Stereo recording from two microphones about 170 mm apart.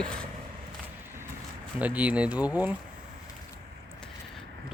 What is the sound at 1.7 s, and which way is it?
Speech, 10° right (ahead or behind).